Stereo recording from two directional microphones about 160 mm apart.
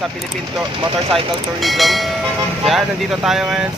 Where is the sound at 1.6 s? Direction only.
Centre (ahead or behind).